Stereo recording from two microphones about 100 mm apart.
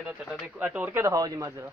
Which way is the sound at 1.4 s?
25° right (ahead or behind).